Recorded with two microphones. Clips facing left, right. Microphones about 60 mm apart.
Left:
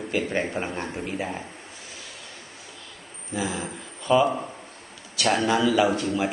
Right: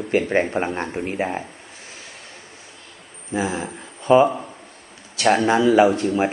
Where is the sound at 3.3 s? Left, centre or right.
Right.